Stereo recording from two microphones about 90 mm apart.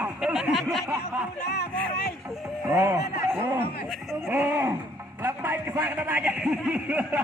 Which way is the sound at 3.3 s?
25° right (ahead or behind).